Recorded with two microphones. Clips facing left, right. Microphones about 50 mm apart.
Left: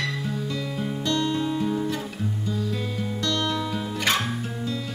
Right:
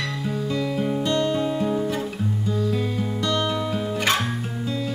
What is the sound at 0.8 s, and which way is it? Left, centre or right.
Guitar, centre.